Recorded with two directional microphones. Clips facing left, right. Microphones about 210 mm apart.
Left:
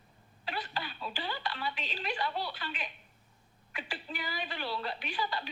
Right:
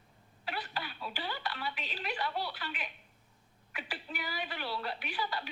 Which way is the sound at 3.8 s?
10° right (ahead or behind).